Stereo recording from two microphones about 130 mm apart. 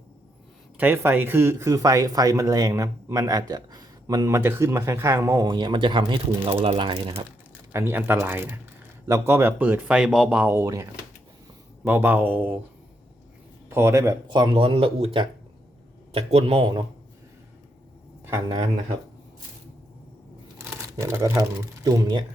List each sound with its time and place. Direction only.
0.8 s a man's voice: 15° right (ahead or behind); by 7.0 s 40° right (ahead or behind)
7.7 s speech: 20° right (ahead or behind)
11.9 s speech: 15° right (ahead or behind)
13.7 s speech: 20° right (ahead or behind)
14.3 s a man's voice: 35° right (ahead or behind)
20.6 s a sound: 20° right (ahead or behind)
21.8 s speech: 30° right (ahead or behind)